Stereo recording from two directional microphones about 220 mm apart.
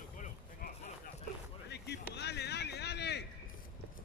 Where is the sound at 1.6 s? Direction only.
50° left (ahead or behind).